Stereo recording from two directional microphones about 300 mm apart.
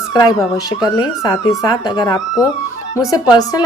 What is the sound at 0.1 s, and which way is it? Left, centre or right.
A woman's voice, centre.